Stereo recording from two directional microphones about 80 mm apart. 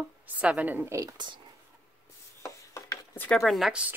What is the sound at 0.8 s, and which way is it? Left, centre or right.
Speech, right.